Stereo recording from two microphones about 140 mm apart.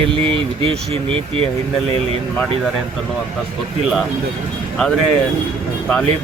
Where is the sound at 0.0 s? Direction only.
40° right (ahead or behind).